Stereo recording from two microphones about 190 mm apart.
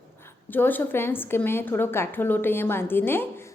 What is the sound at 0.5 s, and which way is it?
A woman's voice, 10° left (ahead or behind).